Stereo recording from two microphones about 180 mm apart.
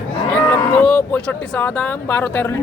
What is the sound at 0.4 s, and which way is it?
Speech, 15° left (ahead or behind).